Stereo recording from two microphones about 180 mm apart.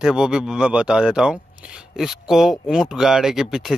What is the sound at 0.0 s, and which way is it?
Speech, 5° right (ahead or behind).